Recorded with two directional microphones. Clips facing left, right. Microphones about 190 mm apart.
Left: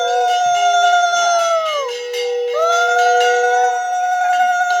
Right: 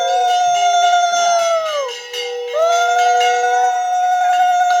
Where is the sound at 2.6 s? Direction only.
Centre (ahead or behind).